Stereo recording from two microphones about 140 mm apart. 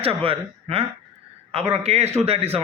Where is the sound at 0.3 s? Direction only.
45° right (ahead or behind).